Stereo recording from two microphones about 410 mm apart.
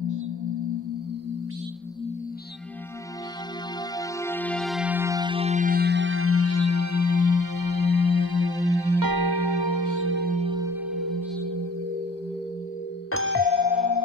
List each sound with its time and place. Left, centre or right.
4.2 s music: centre; by 10.0 s right
10.0 s music: right; by 11.4 s centre
13.1 s doorbell: right